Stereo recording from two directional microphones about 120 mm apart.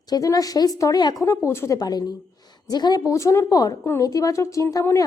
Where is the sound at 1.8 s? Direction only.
35° left (ahead or behind).